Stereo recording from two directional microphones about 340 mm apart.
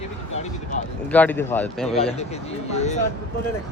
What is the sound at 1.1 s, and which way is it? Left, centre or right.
Speech, centre.